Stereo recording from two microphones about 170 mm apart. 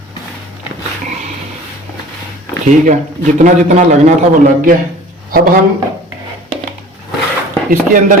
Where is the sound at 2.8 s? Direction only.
50° right (ahead or behind).